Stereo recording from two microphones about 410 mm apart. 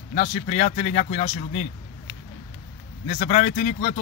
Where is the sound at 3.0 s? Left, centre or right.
Centre.